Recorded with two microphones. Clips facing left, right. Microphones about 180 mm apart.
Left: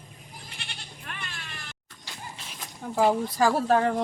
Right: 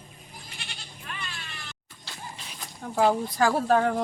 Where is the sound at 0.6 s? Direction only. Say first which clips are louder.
Even; 55° left (ahead or behind).